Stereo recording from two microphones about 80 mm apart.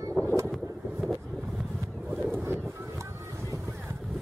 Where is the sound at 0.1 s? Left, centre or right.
Centre.